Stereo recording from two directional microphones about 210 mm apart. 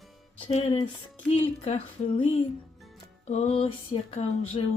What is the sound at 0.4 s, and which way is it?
Music, 25° left (ahead or behind).